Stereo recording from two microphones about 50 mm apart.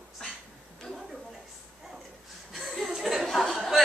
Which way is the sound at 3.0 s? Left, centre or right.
Centre.